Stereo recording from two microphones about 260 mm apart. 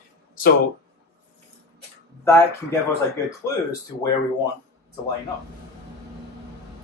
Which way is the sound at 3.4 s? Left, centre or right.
Centre.